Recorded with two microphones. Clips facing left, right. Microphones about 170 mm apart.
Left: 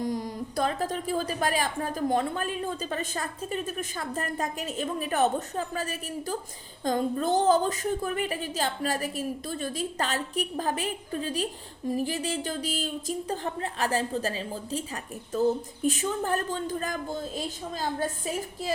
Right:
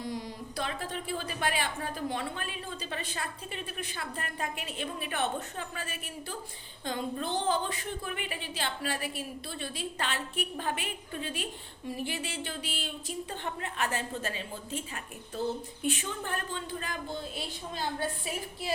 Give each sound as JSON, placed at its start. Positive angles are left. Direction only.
{"t": 0.0, "sound": "a woman's voice", "side_deg": 45}